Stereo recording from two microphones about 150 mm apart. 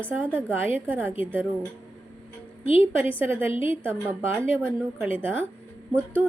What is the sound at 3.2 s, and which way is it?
Speech, 15° right (ahead or behind).